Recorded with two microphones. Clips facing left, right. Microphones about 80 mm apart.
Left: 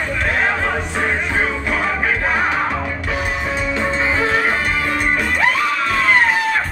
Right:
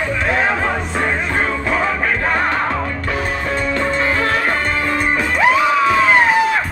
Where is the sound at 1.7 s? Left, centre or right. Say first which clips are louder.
Right 1 dB; centre.